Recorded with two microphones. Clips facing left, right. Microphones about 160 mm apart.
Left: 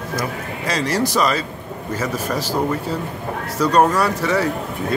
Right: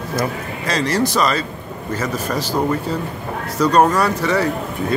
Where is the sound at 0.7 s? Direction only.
10° left (ahead or behind).